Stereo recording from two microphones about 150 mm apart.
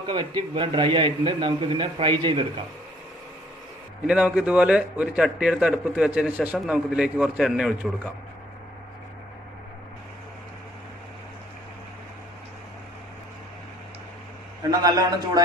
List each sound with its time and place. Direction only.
0.0 s a man's voice: 30° right (ahead or behind)
4.1 s a man's voice: 5° right (ahead or behind)
14.7 s a man's voice: 25° right (ahead or behind)